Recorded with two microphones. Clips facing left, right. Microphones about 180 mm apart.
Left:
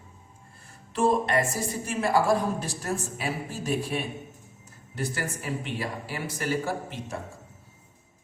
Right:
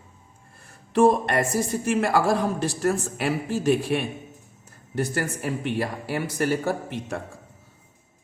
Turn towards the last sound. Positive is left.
turn(degrees=-60)  # may be behind; listen again after turning